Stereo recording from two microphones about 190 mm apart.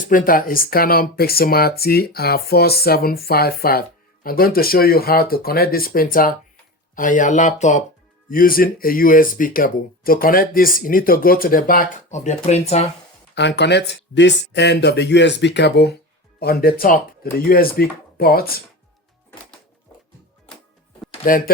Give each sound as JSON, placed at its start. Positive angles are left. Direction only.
{"t": 0.0, "sound": "speech", "side_deg": 45}
{"t": 13.6, "sound": "speech", "side_deg": 65}
{"t": 21.2, "sound": "speech", "side_deg": 45}